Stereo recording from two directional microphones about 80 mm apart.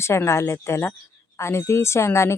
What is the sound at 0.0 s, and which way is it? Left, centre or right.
Speech, left.